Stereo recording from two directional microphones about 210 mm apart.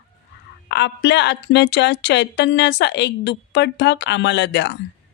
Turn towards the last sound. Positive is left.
turn(degrees=55)  # may be behind; listen again after turning